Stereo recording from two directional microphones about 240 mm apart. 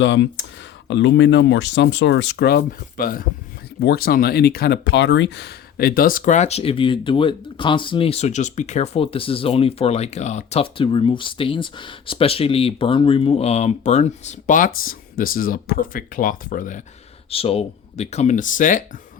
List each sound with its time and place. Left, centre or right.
0.0 s speech: left